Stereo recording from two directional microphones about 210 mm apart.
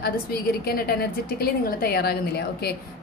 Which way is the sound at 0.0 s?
45° left (ahead or behind).